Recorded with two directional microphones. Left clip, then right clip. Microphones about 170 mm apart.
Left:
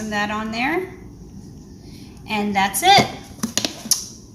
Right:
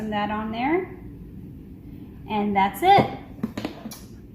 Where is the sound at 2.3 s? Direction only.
20° left (ahead or behind).